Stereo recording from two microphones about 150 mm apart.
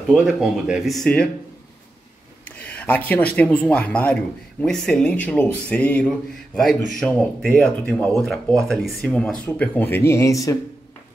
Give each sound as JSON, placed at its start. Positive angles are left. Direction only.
{"t": 0.1, "sound": "speech", "side_deg": 0}
{"t": 2.4, "sound": "speech", "side_deg": 10}